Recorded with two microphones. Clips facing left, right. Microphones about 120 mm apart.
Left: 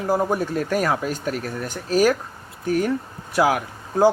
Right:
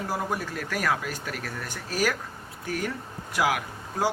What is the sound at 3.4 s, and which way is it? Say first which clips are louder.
Speech: left 6 dB; 30° left (ahead or behind).